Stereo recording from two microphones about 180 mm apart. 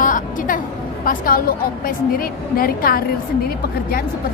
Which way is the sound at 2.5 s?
55° left (ahead or behind).